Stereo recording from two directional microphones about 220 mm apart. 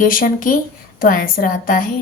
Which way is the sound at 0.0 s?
40° left (ahead or behind).